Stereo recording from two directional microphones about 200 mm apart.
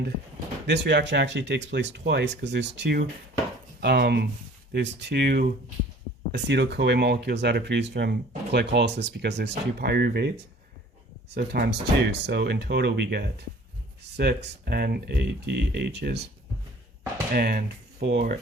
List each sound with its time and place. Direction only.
0.7 s speech: 60° right (ahead or behind)
11.3 s speech: 50° right (ahead or behind)
17.3 s speech: 50° right (ahead or behind)